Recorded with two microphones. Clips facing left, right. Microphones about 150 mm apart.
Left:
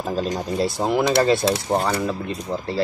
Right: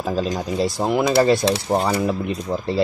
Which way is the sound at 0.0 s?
Centre (ahead or behind).